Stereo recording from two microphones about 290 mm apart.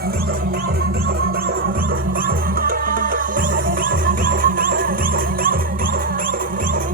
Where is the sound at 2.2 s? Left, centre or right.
Right.